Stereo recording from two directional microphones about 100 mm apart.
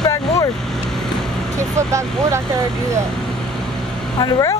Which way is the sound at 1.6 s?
30° right (ahead or behind).